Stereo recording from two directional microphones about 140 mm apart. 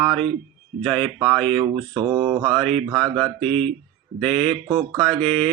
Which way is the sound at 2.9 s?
5° left (ahead or behind).